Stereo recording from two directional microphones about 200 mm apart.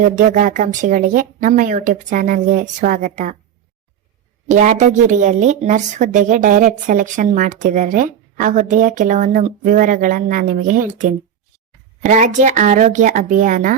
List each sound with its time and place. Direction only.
0.0 s speech: 40° right (ahead or behind)
4.4 s speech: 35° right (ahead or behind)